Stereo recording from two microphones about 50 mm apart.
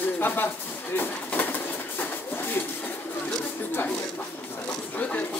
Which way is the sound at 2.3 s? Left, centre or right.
Left.